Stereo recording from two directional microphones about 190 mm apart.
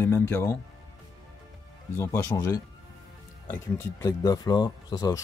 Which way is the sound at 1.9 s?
15° left (ahead or behind).